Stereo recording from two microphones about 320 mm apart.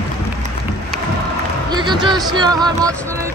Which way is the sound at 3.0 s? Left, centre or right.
Centre.